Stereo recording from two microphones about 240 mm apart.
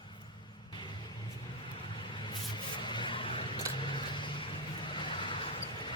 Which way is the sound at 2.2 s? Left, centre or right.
Centre.